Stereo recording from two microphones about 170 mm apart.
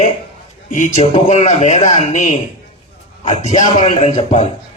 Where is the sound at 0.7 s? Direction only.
45° left (ahead or behind).